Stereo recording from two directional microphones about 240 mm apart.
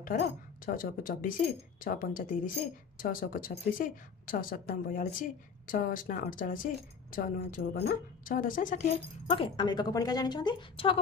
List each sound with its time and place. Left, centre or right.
0.7 s speech: left
9.3 s a woman's voice: left